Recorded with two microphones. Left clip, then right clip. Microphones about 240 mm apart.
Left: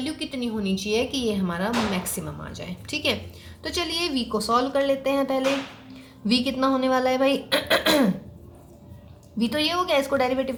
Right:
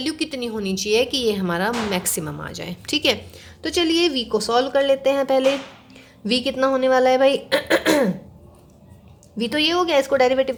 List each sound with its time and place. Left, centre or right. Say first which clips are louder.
0.0 s speech: right 5 dB; right
3.6 s speech: right 7 dB; right
9.4 s speech: right 4 dB; right